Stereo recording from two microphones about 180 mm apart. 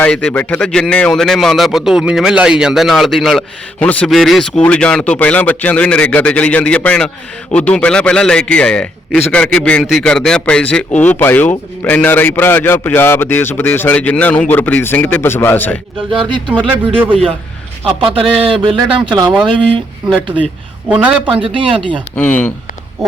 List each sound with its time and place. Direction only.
0.0 s a man's voice: 5° left (ahead or behind)
16.6 s speech: 30° right (ahead or behind)
18.0 s speech: 30° right (ahead or behind)
20.8 s a man's voice: 5° right (ahead or behind)
21.4 s speech: 30° right (ahead or behind)
22.1 s a man's voice: 10° left (ahead or behind)